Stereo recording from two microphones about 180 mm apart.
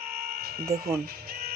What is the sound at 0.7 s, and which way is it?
Speech, 20° right (ahead or behind).